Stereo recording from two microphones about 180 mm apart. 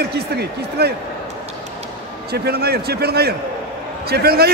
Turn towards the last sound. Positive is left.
turn(degrees=-60)  # may be behind; listen again after turning